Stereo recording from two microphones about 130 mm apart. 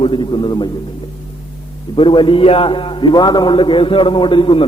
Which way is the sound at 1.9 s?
40° left (ahead or behind).